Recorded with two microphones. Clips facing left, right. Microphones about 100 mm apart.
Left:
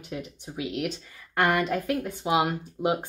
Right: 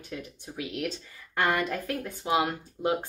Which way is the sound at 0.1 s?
15° left (ahead or behind).